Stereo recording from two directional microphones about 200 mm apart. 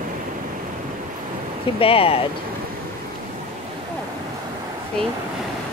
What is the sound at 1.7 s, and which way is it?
Speech, 30° left (ahead or behind).